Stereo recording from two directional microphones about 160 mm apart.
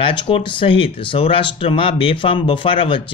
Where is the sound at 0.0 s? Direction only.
30° left (ahead or behind).